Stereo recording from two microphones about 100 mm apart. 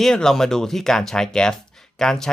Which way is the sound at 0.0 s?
5° left (ahead or behind).